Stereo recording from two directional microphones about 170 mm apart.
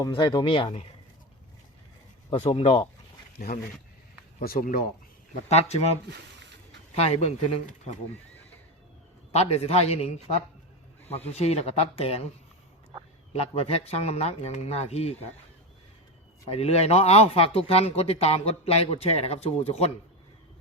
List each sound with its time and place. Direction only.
0.1 s speech: 25° left (ahead or behind)
2.3 s a man's voice: 35° left (ahead or behind)
3.4 s speech: 55° left (ahead or behind)
5.5 s a man's voice: 40° left (ahead or behind)
6.9 s a man's voice: 35° left (ahead or behind)
9.3 s a man's voice: 40° left (ahead or behind)
11.1 s a man's voice: 35° left (ahead or behind)
13.3 s a man's voice: 35° left (ahead or behind)
16.5 s a man's voice: 40° left (ahead or behind)